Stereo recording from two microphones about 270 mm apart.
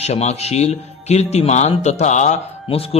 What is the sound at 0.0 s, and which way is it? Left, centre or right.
Speech, left.